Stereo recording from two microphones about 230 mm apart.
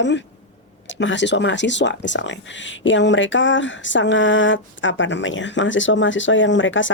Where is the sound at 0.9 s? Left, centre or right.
Left.